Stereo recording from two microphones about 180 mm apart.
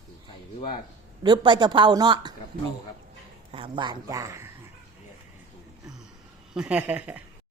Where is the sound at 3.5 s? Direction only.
30° right (ahead or behind).